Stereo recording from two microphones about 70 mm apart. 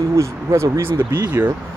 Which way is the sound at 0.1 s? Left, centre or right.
Right.